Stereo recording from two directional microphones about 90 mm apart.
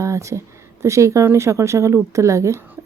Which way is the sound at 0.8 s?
35° right (ahead or behind).